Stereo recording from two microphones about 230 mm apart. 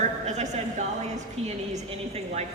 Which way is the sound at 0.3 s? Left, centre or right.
Right.